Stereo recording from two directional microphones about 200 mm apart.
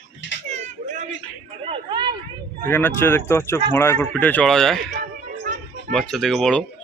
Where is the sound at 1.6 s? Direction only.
25° right (ahead or behind).